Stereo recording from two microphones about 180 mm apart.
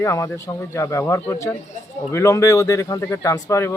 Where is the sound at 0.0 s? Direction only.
15° left (ahead or behind).